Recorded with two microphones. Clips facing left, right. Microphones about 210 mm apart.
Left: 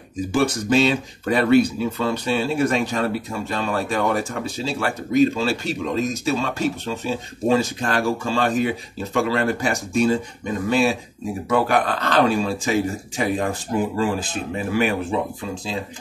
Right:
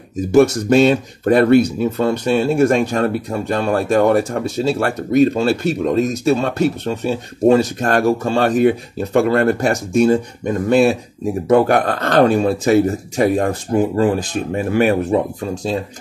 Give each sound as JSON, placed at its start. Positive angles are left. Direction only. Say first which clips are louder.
{"t": 0.3, "sound": "speech", "louder": "right 8 dB", "side_deg": -55}